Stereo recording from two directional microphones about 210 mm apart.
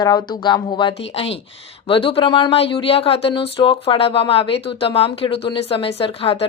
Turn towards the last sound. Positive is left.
turn(degrees=25)  # may be behind; listen again after turning